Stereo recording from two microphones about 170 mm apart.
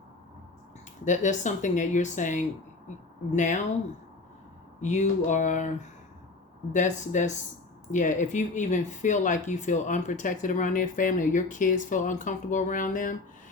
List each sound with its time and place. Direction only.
1.0 s speech: 45° left (ahead or behind)
4.8 s speech: 45° left (ahead or behind)